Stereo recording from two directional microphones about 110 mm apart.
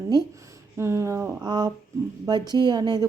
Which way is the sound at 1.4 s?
40° right (ahead or behind).